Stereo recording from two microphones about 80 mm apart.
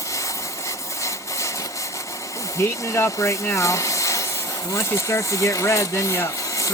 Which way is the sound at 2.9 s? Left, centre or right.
Left.